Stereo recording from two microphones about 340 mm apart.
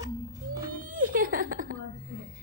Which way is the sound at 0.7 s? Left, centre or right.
Right.